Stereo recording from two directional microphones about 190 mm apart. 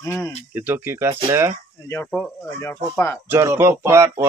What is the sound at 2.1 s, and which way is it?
A man's voice, 5° left (ahead or behind).